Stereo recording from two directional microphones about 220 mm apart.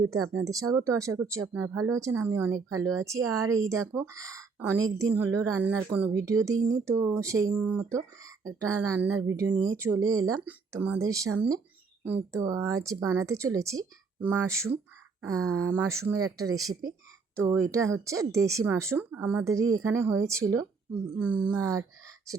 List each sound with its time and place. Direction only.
0.3 s speech: 15° right (ahead or behind)
21.2 s speech: 5° right (ahead or behind)